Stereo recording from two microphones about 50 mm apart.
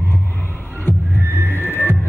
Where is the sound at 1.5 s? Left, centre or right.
Left.